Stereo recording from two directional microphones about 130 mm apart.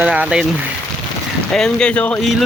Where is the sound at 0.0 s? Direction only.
10° right (ahead or behind).